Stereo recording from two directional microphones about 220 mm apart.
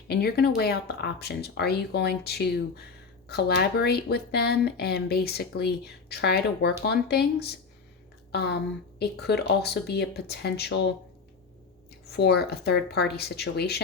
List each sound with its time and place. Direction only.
0.1 s speech: 45° left (ahead or behind)
12.1 s speech: 50° left (ahead or behind)